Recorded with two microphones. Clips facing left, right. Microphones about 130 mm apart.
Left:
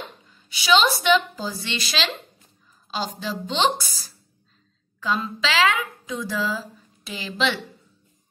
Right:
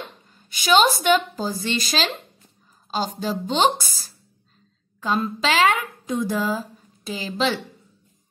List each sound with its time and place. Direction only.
0.3 s a sound: 45° right (ahead or behind)
1.0 s a woman's voice: 45° right (ahead or behind)
5.0 s a woman's voice: 50° right (ahead or behind)